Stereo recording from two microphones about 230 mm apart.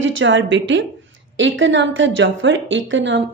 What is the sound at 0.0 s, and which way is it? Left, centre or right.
A woman's voice, right.